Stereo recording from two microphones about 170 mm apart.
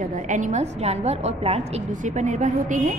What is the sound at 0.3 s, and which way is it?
A woman's voice, 45° right (ahead or behind).